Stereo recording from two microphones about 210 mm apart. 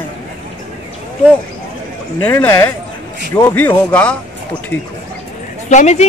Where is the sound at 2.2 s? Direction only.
10° left (ahead or behind).